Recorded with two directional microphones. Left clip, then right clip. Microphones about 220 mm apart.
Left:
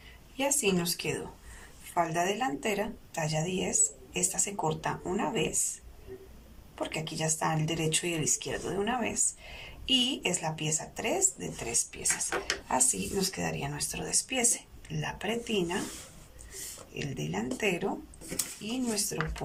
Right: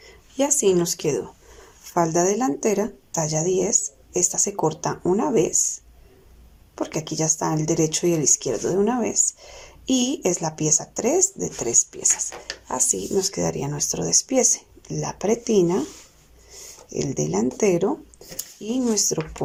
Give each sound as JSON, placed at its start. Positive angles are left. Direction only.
{"t": 0.3, "sound": "a woman's voice", "side_deg": -35}
{"t": 6.7, "sound": "speech", "side_deg": -30}
{"t": 16.9, "sound": "speech", "side_deg": -25}